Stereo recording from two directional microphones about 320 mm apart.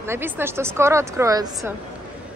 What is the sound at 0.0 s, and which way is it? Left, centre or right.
A woman's voice, centre.